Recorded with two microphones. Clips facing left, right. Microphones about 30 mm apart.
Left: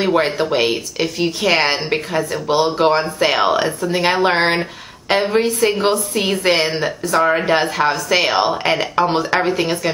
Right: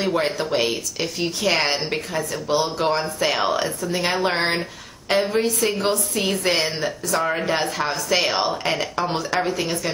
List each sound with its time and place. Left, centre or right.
0.0 s speech: left
7.9 s speech: centre
8.4 s speech: left